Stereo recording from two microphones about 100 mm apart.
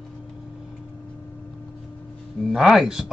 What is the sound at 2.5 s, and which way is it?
Speech, 5° right (ahead or behind).